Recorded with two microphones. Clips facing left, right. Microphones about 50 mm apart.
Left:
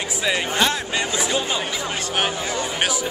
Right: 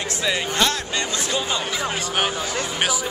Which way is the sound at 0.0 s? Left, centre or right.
Centre.